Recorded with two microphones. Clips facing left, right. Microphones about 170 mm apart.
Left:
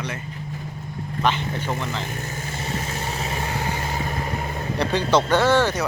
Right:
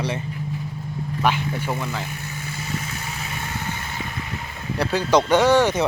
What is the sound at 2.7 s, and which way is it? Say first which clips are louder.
Vehicle: left 3 dB; 30° left (ahead or behind).